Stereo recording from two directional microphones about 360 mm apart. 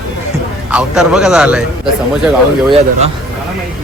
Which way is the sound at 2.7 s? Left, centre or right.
Centre.